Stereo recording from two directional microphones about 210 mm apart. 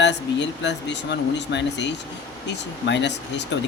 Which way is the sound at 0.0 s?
55° left (ahead or behind).